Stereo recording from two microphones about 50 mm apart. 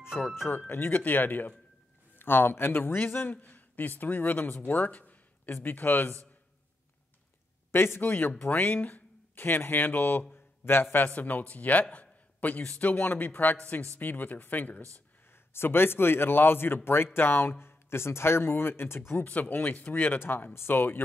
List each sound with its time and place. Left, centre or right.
0.7 s a man's voice: left
4.6 s a sound: left
5.5 s a man's voice: left
7.7 s speech: left
10.3 s a sound: left
11.1 s a man's voice: left
15.5 s speech: left
19.2 s a man's voice: left